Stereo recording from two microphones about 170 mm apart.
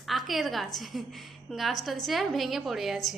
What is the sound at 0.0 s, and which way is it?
A woman's voice, centre (ahead or behind).